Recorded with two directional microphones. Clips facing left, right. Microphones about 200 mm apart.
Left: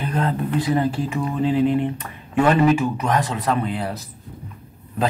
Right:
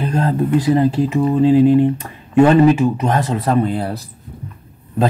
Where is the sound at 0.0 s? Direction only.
30° right (ahead or behind).